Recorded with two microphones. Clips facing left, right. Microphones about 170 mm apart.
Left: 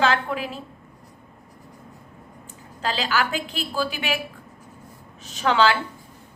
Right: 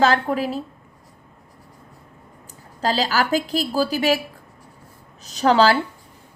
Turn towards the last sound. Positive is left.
turn(degrees=-40)  # may be behind; listen again after turning